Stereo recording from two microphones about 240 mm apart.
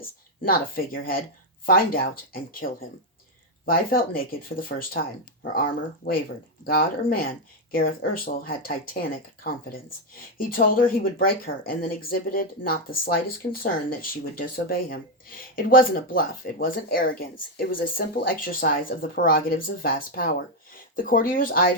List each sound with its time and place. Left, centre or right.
0.0 s speech: left
6.7 s speech: left